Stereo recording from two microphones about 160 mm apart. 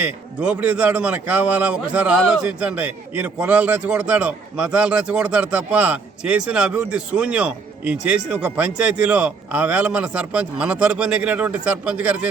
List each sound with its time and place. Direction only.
0.0 s a man's voice: 10° right (ahead or behind)